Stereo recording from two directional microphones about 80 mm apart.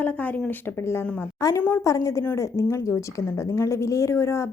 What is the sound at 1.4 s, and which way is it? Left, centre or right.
A woman's voice, left.